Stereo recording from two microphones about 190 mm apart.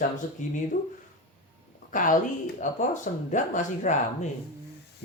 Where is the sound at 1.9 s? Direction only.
45° left (ahead or behind).